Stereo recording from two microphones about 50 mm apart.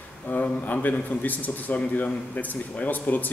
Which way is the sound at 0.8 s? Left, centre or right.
Left.